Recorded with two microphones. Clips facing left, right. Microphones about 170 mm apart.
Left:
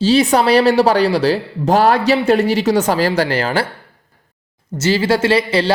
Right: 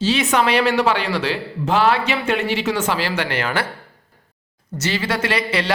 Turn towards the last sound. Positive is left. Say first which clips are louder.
# left 7 dB
turn(degrees=30)  # may be behind; listen again after turning